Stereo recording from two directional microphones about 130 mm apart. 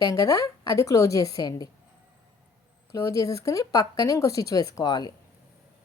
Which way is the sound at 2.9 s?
25° left (ahead or behind).